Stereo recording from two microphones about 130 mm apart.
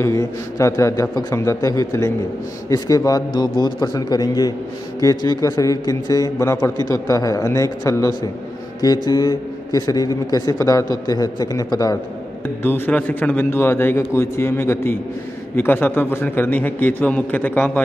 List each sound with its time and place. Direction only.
0.0 s a man's voice: 25° left (ahead or behind)
12.6 s a man's voice: 15° left (ahead or behind)